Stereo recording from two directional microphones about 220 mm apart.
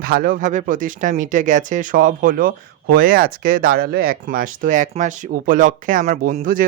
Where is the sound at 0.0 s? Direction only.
40° right (ahead or behind).